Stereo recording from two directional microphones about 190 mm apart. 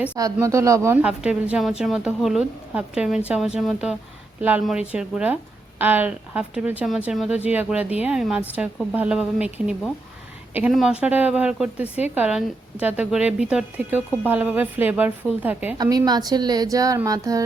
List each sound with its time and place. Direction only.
0.2 s a woman's voice: 15° right (ahead or behind)
15.8 s a woman's voice: 20° right (ahead or behind)